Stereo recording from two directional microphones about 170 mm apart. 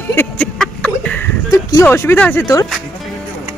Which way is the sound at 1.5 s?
20° left (ahead or behind).